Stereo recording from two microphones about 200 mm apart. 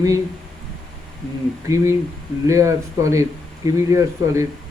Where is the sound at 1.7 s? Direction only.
15° right (ahead or behind).